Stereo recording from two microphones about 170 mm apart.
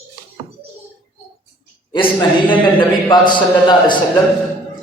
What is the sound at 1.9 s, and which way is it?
Speech, 30° left (ahead or behind).